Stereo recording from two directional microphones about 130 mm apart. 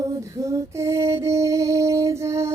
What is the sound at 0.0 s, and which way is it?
Music, 25° right (ahead or behind).